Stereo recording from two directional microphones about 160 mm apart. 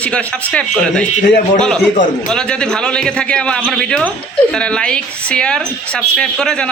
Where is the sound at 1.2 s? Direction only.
65° left (ahead or behind).